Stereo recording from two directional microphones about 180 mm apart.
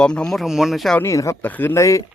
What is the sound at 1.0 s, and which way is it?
Speech, 15° left (ahead or behind).